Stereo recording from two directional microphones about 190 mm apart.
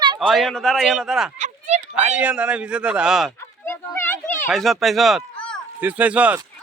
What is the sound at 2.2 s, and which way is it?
Speech, 5° right (ahead or behind).